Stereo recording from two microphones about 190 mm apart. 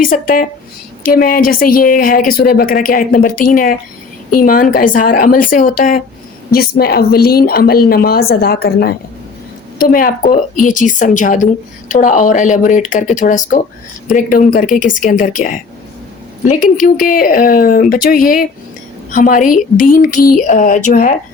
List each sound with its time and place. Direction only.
0.0 s a woman's voice: 45° left (ahead or behind)